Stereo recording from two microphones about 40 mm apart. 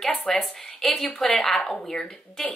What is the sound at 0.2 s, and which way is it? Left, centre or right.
Speech, centre.